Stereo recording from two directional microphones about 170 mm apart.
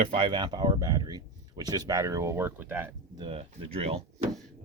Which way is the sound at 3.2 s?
35° right (ahead or behind).